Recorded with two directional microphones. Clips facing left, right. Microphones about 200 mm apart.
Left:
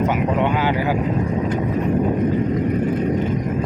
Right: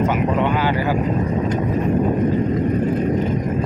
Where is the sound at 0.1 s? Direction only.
15° left (ahead or behind).